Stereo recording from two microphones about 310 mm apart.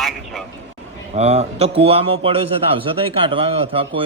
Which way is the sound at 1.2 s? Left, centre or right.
Centre.